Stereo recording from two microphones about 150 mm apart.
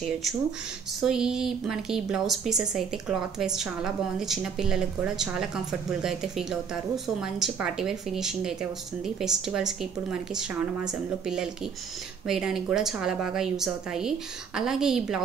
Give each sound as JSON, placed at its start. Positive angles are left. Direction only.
{"t": 1.0, "sound": "a woman's voice", "side_deg": -5}